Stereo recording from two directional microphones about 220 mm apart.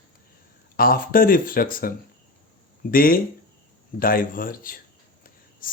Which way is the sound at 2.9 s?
40° left (ahead or behind).